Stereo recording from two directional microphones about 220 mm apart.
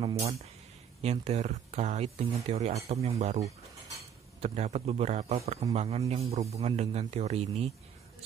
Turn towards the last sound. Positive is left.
turn(degrees=-30)  # may be behind; listen again after turning